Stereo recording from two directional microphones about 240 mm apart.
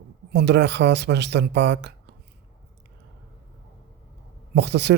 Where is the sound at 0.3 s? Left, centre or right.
Right.